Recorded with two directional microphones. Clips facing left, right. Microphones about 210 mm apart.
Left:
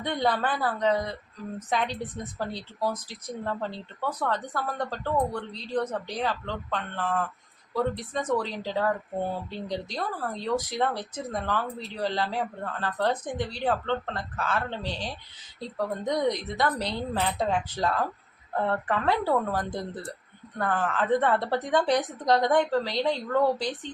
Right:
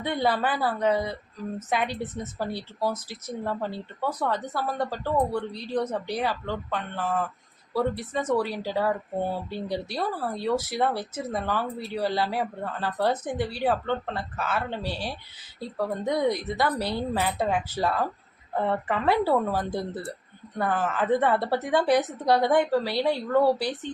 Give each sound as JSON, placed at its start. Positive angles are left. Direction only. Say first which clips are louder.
{"t": 0.0, "sound": "a woman's voice", "louder": "right 1 dB", "side_deg": -5}